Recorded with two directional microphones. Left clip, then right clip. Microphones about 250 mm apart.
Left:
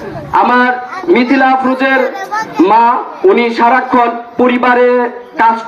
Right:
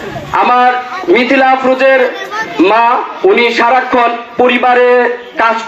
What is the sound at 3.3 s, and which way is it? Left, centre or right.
A man's voice, left.